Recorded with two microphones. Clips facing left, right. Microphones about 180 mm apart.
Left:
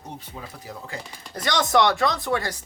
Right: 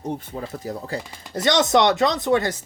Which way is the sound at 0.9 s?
35° right (ahead or behind).